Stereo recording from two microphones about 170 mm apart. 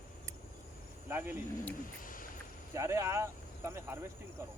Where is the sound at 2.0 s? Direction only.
55° left (ahead or behind).